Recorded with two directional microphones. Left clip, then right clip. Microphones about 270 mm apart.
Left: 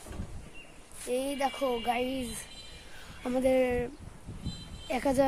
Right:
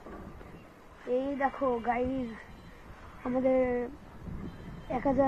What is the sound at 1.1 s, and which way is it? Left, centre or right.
Speech, left.